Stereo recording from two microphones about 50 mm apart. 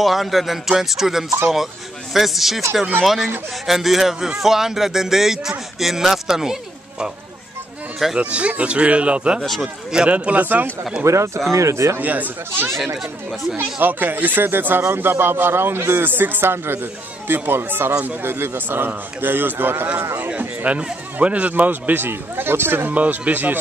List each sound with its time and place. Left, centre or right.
0.0 s speech: centre
8.2 s speech: right
9.4 s speech: centre
9.9 s speech: right
11.1 s a man's voice: right
11.5 s speech: right
12.0 s a man's voice: right
20.2 s speech: right
22.8 s speech: right